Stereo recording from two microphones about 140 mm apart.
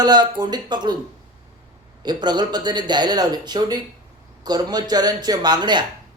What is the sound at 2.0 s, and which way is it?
Speech, 30° right (ahead or behind).